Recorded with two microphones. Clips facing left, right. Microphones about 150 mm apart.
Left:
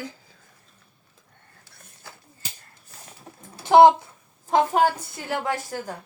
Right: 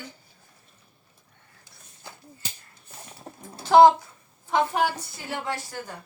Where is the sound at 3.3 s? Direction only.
30° right (ahead or behind).